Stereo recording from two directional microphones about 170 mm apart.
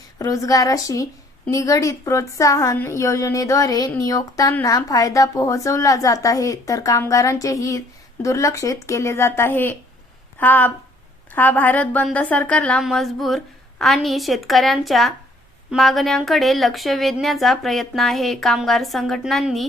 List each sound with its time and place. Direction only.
0.2 s a woman's voice: 20° left (ahead or behind); by 19.6 s centre (ahead or behind)